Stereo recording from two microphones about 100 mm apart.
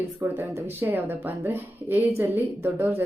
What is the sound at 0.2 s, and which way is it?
Speech, 20° right (ahead or behind).